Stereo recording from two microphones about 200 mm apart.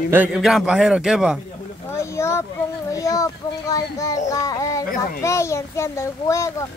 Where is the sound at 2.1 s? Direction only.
15° left (ahead or behind).